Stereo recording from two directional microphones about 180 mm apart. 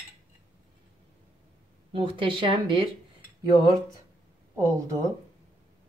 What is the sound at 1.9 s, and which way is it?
Speech, 30° right (ahead or behind).